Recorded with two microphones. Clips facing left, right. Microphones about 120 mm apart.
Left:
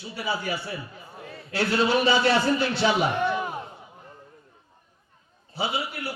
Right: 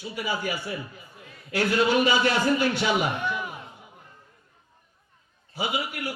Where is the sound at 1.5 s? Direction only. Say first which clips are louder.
Even; 15° right (ahead or behind).